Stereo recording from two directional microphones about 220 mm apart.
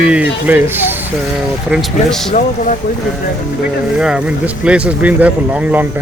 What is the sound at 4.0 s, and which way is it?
Speech, 5° right (ahead or behind).